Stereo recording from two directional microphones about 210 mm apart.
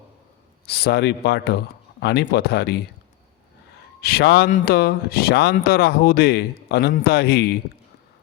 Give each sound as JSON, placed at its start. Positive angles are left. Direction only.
{"t": 0.7, "sound": "speech", "side_deg": 50}
{"t": 4.0, "sound": "speech", "side_deg": 50}